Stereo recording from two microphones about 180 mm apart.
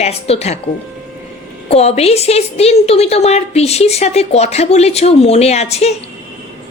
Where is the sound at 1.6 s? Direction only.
35° left (ahead or behind).